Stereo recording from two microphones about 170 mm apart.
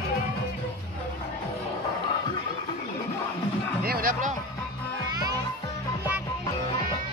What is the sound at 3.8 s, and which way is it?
Music, 60° right (ahead or behind).